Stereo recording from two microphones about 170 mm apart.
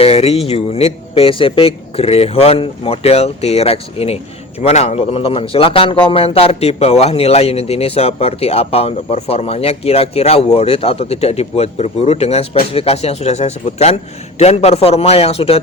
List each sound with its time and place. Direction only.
0.0 s a man's voice: 35° left (ahead or behind)